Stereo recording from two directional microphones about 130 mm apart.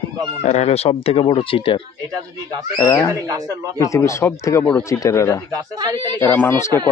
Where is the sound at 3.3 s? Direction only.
25° right (ahead or behind).